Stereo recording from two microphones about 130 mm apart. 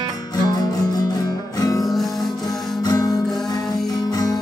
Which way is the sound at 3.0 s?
Centre (ahead or behind).